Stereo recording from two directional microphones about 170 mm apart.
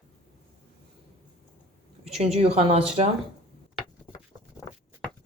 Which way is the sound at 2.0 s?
40° right (ahead or behind).